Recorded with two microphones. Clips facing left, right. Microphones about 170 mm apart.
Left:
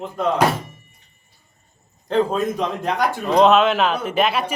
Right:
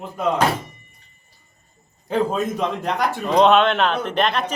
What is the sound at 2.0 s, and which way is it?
A man's voice, centre (ahead or behind).